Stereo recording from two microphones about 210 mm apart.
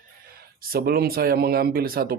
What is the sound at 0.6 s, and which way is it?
A man's voice, 45° right (ahead or behind).